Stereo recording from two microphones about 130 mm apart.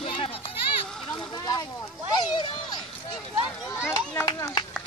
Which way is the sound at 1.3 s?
30° left (ahead or behind).